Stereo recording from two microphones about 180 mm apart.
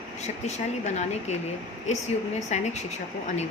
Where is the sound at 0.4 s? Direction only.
40° left (ahead or behind).